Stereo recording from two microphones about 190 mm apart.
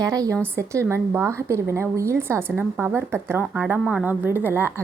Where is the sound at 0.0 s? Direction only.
20° right (ahead or behind).